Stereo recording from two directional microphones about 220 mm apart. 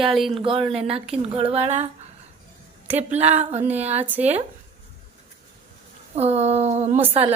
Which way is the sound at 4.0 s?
10° right (ahead or behind).